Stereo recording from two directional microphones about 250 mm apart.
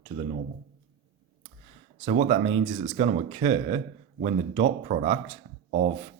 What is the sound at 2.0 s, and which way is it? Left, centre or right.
Speech, right.